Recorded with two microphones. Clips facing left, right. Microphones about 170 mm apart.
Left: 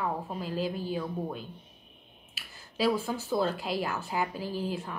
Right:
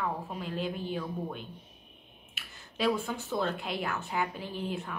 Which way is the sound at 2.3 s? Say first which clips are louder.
Even; 5° left (ahead or behind).